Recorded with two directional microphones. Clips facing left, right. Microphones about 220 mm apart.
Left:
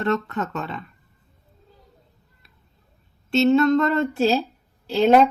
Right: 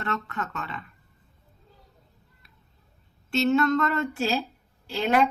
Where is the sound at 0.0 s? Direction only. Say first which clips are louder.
Left 8 dB; 40° left (ahead or behind).